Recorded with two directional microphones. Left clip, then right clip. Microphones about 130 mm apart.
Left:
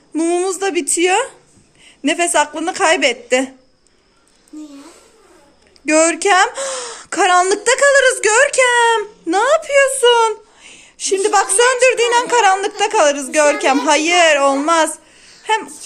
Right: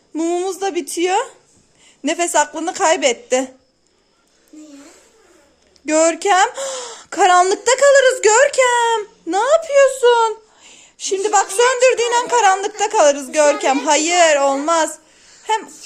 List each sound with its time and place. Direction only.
0.1 s a child's voice: 20° right (ahead or behind)
5.8 s speech: 25° right (ahead or behind)